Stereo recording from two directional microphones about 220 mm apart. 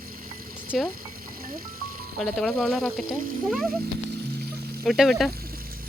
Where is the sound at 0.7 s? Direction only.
Centre (ahead or behind).